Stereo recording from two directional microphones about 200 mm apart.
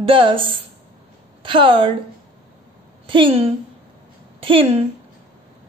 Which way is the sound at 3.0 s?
25° right (ahead or behind).